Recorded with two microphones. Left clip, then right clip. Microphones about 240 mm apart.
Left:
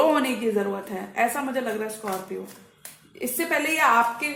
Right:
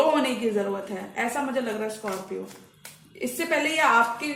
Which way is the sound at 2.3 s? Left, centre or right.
Left.